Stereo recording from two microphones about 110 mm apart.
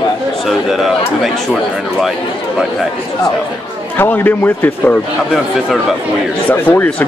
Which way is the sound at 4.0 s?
20° left (ahead or behind).